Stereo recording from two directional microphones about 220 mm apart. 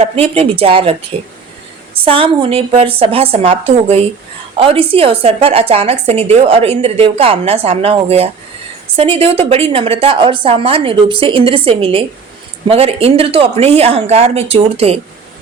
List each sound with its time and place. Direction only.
0.0 s a woman's voice: 25° right (ahead or behind)
2.0 s a woman's voice: 25° right (ahead or behind)